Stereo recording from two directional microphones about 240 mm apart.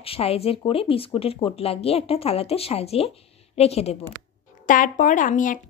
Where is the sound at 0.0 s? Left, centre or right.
Left.